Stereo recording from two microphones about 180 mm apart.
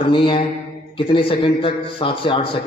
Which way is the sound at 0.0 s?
30° left (ahead or behind).